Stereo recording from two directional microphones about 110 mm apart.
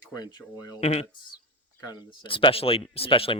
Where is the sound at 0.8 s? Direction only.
70° left (ahead or behind).